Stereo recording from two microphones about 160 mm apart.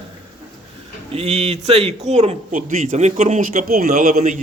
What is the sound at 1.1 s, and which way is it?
A man's voice, 40° right (ahead or behind).